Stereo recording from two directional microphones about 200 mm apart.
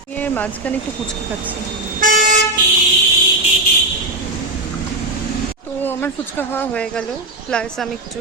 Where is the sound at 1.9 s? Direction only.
40° right (ahead or behind).